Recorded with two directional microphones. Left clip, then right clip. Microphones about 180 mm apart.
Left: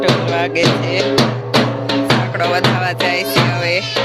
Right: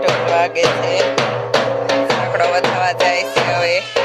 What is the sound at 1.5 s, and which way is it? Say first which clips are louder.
Music: right 1 dB; 65° right (ahead or behind).